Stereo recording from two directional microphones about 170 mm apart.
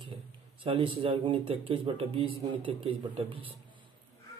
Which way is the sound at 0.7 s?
30° right (ahead or behind).